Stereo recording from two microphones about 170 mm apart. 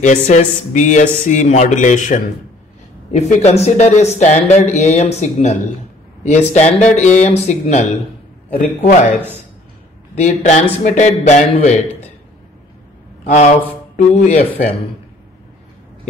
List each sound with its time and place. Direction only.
0.0 s a man's voice: 45° left (ahead or behind)
13.2 s speech: 40° left (ahead or behind)